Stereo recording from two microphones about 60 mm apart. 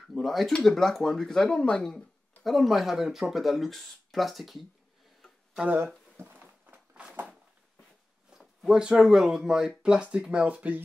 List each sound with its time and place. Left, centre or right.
0.0 s speech: centre
2.4 s speech: centre
6.1 s a sound: right
8.3 s speech: centre